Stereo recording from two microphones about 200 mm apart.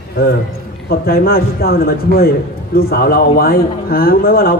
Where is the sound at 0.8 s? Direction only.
50° left (ahead or behind).